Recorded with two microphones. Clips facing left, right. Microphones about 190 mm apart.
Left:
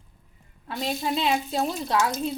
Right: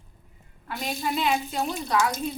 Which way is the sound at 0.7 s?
25° left (ahead or behind).